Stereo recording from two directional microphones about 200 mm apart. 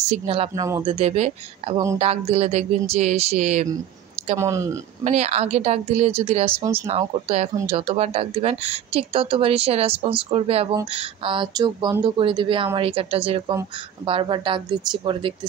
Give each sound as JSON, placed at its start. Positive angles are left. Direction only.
{"t": 0.1, "sound": "a woman's voice", "side_deg": -30}
{"t": 0.6, "sound": "speech", "side_deg": -15}
{"t": 0.8, "sound": "speech", "side_deg": -30}
{"t": 4.4, "sound": "speech", "side_deg": -15}
{"t": 5.0, "sound": "a woman's voice", "side_deg": -30}